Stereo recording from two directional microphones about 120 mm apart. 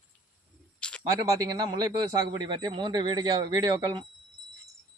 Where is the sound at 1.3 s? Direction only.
35° right (ahead or behind).